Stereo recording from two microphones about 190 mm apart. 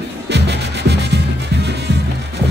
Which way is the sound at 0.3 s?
65° right (ahead or behind).